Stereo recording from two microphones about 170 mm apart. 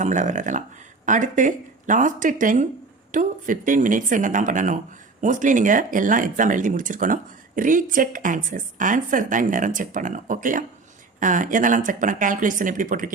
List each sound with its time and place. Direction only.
0.0 s speech: 45° right (ahead or behind)